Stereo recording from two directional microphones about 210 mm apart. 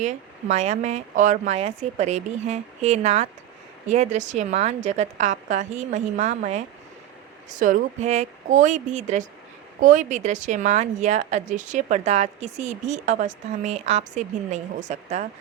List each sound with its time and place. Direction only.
0.0 s a woman's voice: 35° right (ahead or behind)